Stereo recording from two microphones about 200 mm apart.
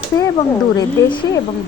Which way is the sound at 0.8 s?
25° left (ahead or behind).